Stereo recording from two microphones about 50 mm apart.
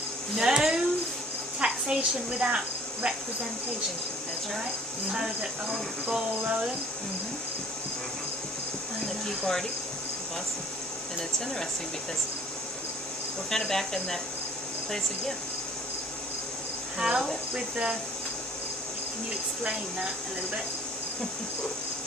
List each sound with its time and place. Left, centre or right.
0.3 s a woman's voice: centre
5.1 s speech: centre
6.4 s speech: right
9.0 s a sound: centre
13.5 s speech: centre
17.0 s speech: centre